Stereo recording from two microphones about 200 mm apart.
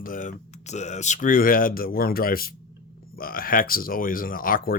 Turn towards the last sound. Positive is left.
turn(degrees=45)  # may be behind; listen again after turning